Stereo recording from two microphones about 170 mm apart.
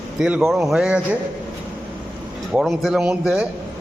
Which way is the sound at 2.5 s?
Centre (ahead or behind).